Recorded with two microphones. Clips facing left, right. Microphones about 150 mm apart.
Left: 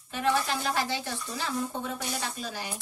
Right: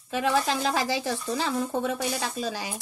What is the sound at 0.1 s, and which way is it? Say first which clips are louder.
Speech: right 3 dB; 90° right.